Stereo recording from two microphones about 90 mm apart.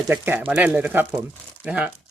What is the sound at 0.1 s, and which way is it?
Speech, 20° right (ahead or behind).